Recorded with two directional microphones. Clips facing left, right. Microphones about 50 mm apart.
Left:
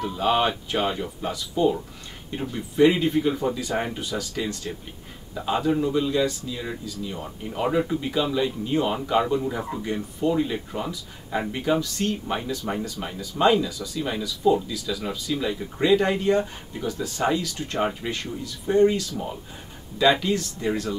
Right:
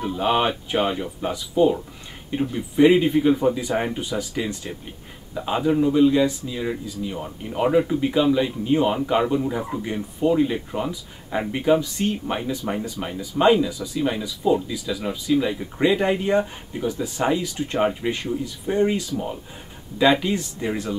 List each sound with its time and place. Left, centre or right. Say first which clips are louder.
0.0 s speech: right 1 dB; centre